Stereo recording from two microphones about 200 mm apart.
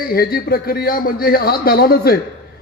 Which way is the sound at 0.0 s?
50° left (ahead or behind).